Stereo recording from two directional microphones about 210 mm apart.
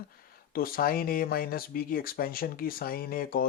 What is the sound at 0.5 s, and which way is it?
Speech, 45° left (ahead or behind).